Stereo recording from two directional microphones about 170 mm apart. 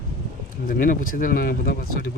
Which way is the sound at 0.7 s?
55° left (ahead or behind).